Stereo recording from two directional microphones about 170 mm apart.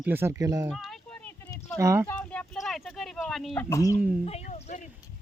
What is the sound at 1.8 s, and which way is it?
Speech, 15° right (ahead or behind).